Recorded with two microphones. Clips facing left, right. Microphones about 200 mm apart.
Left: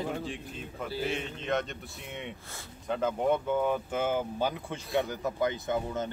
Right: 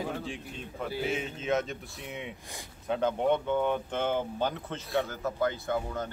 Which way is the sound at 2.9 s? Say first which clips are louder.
Right 1 dB; centre (ahead or behind).